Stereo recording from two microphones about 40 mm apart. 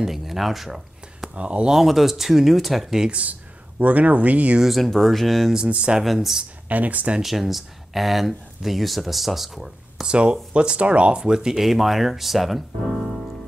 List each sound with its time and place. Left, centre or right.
0.0 s a sound: centre
1.3 s speech: right
1.7 s speech: centre
3.1 s speech: right
4.6 s speech: centre
5.7 s speech: right
5.9 s speech: centre
6.7 s speech: right
7.2 s speech: centre
10.0 s speech: right; by 12.6 s centre